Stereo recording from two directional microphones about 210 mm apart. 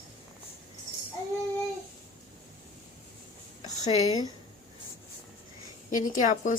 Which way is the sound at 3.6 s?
20° left (ahead or behind).